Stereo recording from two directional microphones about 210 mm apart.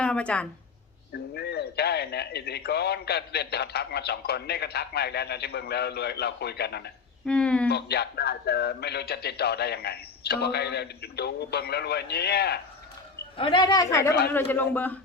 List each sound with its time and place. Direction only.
0.0 s a woman's voice: 5° left (ahead or behind)
1.1 s speech: 50° left (ahead or behind)
7.3 s speech: 5° left (ahead or behind)
7.7 s speech: 50° left (ahead or behind)
13.3 s speech: 25° left (ahead or behind); by 14.9 s 10° left (ahead or behind)